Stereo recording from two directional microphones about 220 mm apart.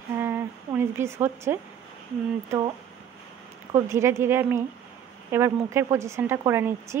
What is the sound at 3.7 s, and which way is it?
Speech, 10° right (ahead or behind).